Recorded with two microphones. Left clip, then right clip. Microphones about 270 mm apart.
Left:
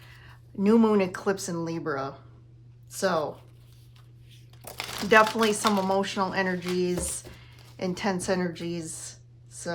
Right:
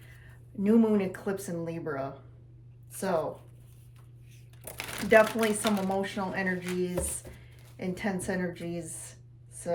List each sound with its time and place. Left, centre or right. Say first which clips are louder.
0.6 s speech: left 4 dB; centre
4.6 s speech: left 3 dB; centre